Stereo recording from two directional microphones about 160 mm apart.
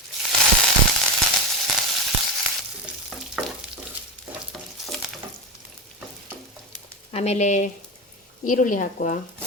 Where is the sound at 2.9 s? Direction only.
5° right (ahead or behind).